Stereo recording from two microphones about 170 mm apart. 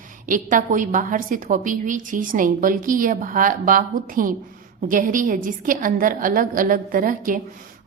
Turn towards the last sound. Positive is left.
turn(degrees=-55)  # may be behind; listen again after turning